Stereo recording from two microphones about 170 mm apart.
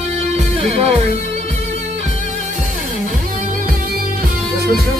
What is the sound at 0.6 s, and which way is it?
Music, 35° right (ahead or behind).